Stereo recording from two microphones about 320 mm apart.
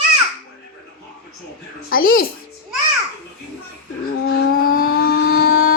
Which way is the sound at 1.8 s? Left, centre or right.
Left.